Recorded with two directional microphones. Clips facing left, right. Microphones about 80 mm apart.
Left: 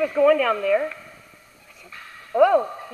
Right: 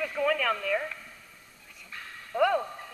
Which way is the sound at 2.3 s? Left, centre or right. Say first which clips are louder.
Left 9 dB; left.